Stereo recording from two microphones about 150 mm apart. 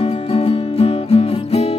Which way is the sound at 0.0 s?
40° left (ahead or behind).